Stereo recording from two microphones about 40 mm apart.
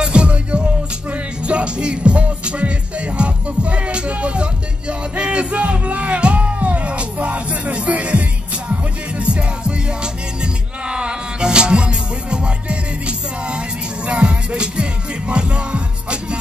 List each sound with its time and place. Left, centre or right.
0.0 s music: right